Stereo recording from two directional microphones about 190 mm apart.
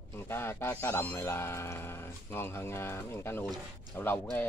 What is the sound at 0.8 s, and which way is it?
Speech, 10° left (ahead or behind).